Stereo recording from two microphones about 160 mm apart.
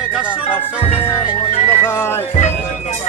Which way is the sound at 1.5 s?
45° left (ahead or behind).